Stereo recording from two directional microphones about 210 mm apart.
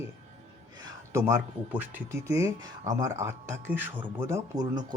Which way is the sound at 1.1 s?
10° right (ahead or behind).